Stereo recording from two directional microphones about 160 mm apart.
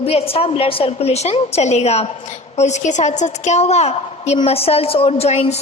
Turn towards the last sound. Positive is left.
turn(degrees=45)  # may be behind; listen again after turning